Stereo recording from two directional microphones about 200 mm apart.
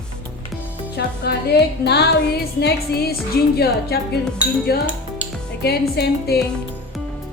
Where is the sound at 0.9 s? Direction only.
55° left (ahead or behind).